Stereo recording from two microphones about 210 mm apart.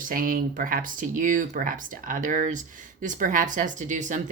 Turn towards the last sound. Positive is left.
turn(degrees=-35)  # may be behind; listen again after turning